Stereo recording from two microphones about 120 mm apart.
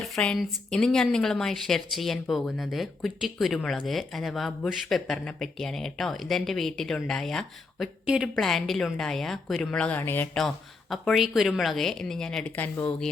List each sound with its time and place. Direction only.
0.3 s speech: 5° left (ahead or behind)
8.0 s speech: 5° right (ahead or behind); by 10.2 s 20° left (ahead or behind)
10.3 s speech: centre (ahead or behind)